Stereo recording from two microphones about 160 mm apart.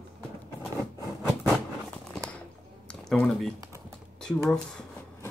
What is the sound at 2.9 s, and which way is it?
Speech, 5° left (ahead or behind).